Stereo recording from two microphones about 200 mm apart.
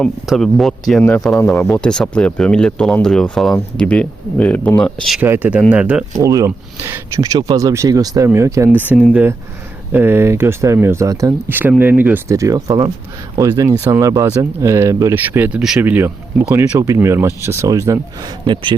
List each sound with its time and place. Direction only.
0.0 s speech: centre (ahead or behind)
5.2 s speech: 10° right (ahead or behind)
8.9 s speech: 5° right (ahead or behind); by 18.8 s 25° right (ahead or behind)